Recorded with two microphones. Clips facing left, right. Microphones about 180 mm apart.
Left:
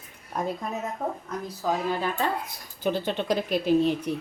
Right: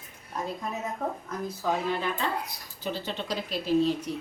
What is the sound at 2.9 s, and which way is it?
Speech, 55° left (ahead or behind).